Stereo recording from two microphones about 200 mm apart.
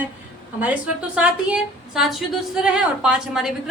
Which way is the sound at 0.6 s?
5° right (ahead or behind).